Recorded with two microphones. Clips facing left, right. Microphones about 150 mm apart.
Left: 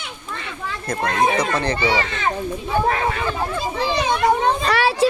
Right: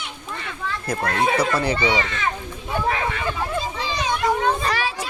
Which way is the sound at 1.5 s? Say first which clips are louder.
Left 1 dB; 10° right (ahead or behind).